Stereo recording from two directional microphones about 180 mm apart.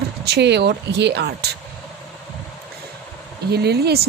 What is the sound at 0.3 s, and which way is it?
Speech, 70° right (ahead or behind).